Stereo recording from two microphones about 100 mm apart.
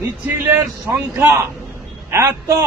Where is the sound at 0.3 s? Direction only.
25° right (ahead or behind).